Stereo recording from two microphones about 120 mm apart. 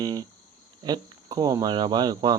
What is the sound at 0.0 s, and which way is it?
Speech, 35° right (ahead or behind).